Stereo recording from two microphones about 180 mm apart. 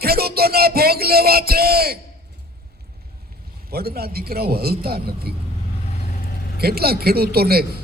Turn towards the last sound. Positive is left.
turn(degrees=-60)  # may be behind; listen again after turning